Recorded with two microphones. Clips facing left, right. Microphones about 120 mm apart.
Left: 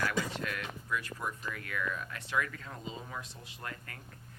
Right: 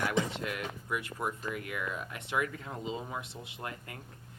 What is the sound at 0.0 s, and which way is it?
Speech, 20° right (ahead or behind).